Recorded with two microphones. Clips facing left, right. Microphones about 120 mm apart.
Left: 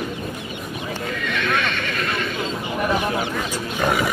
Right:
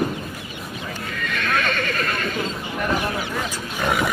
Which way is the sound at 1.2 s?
40° right (ahead or behind).